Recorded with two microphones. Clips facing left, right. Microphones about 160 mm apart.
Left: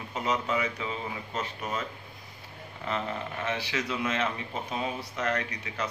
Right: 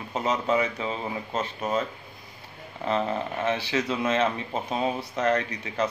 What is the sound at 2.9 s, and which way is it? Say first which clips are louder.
Speech: right 6 dB; 30° right (ahead or behind).